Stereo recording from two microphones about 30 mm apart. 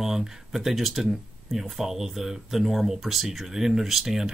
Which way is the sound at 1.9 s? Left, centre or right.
Centre.